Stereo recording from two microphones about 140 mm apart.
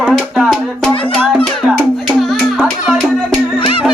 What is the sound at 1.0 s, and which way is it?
Music, 10° left (ahead or behind).